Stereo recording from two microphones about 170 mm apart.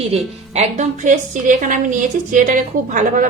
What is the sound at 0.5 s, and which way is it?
A woman's voice, 40° right (ahead or behind).